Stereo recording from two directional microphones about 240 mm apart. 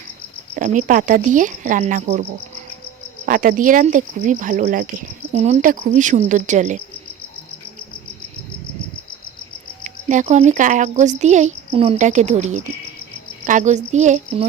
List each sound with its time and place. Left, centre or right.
0.5 s speech: right
3.2 s speech: right
9.8 s speech: right